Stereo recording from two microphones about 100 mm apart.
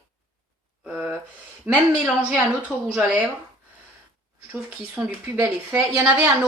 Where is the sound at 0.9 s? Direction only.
15° right (ahead or behind).